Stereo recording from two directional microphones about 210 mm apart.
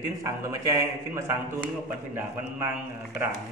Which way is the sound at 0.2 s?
15° right (ahead or behind).